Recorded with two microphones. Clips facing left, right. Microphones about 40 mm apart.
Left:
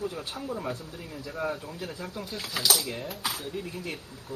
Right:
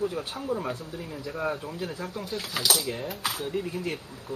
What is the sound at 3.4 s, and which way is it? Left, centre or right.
Speech, right.